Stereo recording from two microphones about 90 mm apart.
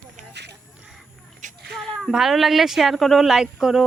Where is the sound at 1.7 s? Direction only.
Centre (ahead or behind).